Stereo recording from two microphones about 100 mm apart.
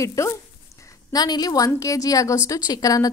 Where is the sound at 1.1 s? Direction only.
40° left (ahead or behind).